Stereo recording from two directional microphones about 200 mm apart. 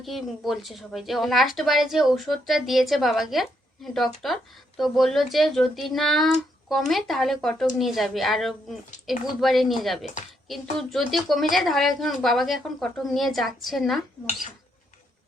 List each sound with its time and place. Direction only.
0.0 s a woman's voice: centre (ahead or behind)